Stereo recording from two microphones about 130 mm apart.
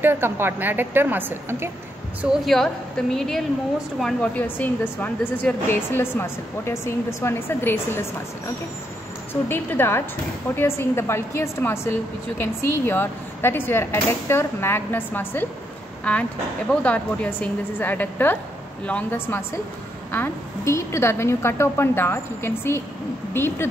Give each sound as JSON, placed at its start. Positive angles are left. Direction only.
{"t": 0.0, "sound": "a woman's voice", "side_deg": -15}
{"t": 2.2, "sound": "a woman's voice", "side_deg": 0}
{"t": 9.3, "sound": "a woman's voice", "side_deg": 15}